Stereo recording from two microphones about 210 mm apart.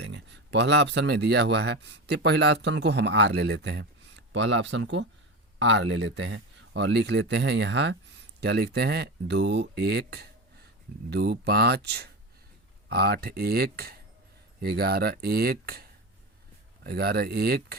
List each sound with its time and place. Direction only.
0.0 s speech: 60° right (ahead or behind)